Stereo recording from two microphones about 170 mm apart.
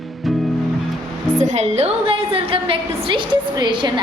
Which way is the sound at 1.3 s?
45° right (ahead or behind).